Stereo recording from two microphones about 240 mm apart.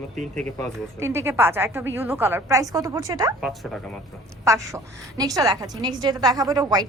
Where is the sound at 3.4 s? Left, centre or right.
Centre.